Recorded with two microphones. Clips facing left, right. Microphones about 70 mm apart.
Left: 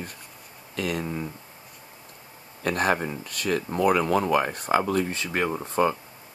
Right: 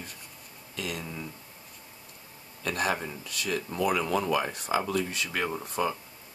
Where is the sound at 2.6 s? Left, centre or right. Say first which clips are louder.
Left 5 dB; left.